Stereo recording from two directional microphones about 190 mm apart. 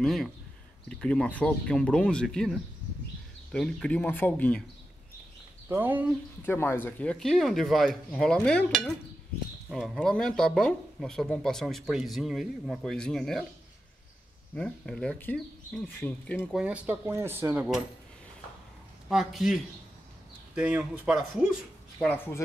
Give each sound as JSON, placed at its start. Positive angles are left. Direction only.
{"t": 0.0, "sound": "speech", "side_deg": 0}
{"t": 5.7, "sound": "speech", "side_deg": -10}
{"t": 6.4, "sound": "speech", "side_deg": 10}
{"t": 14.5, "sound": "speech", "side_deg": 5}
{"t": 16.6, "sound": "speech", "side_deg": -10}
{"t": 19.0, "sound": "speech", "side_deg": 0}
{"t": 21.9, "sound": "speech", "side_deg": 10}